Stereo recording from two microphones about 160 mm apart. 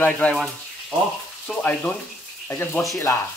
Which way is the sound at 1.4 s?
10° left (ahead or behind).